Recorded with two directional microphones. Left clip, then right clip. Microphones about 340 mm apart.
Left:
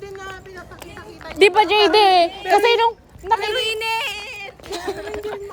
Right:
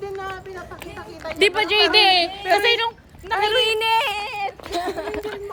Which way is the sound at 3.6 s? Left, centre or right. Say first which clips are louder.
Right 3 dB; centre.